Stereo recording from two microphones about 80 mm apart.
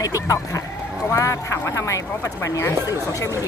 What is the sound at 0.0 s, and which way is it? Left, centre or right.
A woman's voice, left.